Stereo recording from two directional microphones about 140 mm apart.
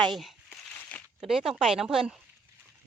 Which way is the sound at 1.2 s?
5° right (ahead or behind).